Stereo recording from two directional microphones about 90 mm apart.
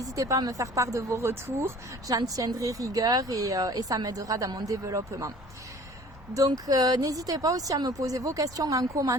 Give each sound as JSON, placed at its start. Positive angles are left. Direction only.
{"t": 0.0, "sound": "speech", "side_deg": -40}
{"t": 2.0, "sound": "speech", "side_deg": -40}
{"t": 6.3, "sound": "speech", "side_deg": -40}